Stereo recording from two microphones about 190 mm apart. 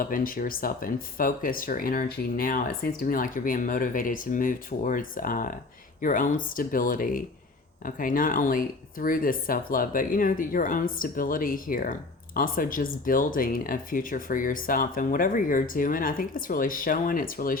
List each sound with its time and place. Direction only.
0.0 s speech: 50° left (ahead or behind)